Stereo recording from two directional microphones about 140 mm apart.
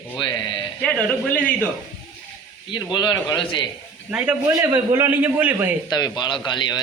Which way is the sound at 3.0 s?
30° left (ahead or behind).